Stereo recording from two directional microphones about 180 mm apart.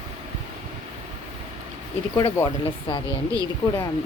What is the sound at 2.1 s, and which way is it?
Speech, 25° left (ahead or behind).